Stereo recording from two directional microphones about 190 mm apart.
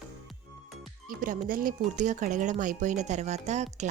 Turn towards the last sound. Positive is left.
turn(degrees=-35)  # may be behind; listen again after turning